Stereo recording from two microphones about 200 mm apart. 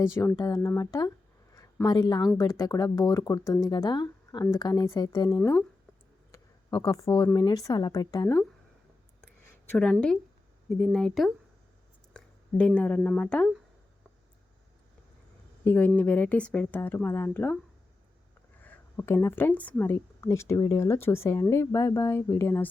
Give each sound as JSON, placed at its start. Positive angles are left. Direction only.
{"t": 0.0, "sound": "a woman's voice", "side_deg": 15}
{"t": 5.4, "sound": "a woman's voice", "side_deg": 10}
{"t": 6.3, "sound": "a sound", "side_deg": 20}
{"t": 7.3, "sound": "speech", "side_deg": 20}
{"t": 9.6, "sound": "a woman's voice", "side_deg": 5}
{"t": 15.6, "sound": "a woman's voice", "side_deg": 10}
{"t": 18.6, "sound": "a woman's voice", "side_deg": 10}